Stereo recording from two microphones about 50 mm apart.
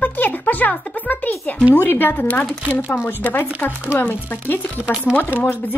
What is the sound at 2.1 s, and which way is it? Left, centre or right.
Speech, left.